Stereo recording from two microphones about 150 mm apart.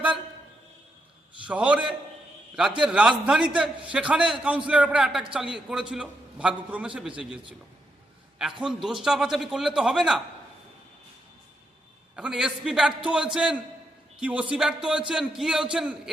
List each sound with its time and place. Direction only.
1.5 s a man's voice: 10° right (ahead or behind)
2.8 s a man's voice: 5° right (ahead or behind)
8.6 s a man's voice: 5° right (ahead or behind)
12.1 s a man's voice: 5° right (ahead or behind)